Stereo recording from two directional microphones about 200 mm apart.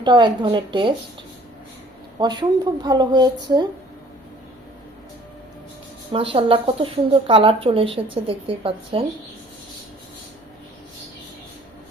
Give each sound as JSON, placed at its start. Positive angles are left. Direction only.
{"t": 0.0, "sound": "speech", "side_deg": -25}
{"t": 2.1, "sound": "speech", "side_deg": -20}
{"t": 6.1, "sound": "speech", "side_deg": -25}